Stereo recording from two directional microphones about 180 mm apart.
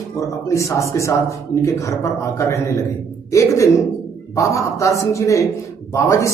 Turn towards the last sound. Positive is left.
turn(degrees=15)  # may be behind; listen again after turning